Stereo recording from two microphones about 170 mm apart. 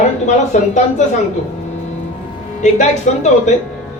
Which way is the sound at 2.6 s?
45° left (ahead or behind).